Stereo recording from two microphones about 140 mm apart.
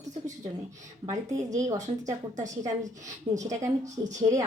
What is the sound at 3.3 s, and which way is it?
Speech, 25° right (ahead or behind).